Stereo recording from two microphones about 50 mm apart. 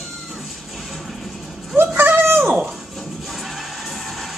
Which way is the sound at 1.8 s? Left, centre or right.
Right.